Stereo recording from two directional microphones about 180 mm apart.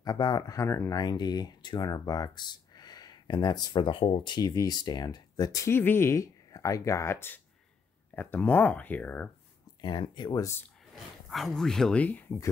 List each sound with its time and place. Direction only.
0.0 s speech: 20° left (ahead or behind)
9.8 s speech: 25° left (ahead or behind)
11.2 s speech: centre (ahead or behind)